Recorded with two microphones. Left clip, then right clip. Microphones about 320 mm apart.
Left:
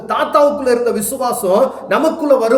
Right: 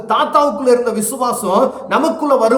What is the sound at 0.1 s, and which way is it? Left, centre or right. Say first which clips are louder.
A man's voice: left 1 dB; centre.